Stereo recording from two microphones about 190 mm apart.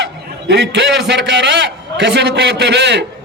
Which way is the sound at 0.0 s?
65° right (ahead or behind).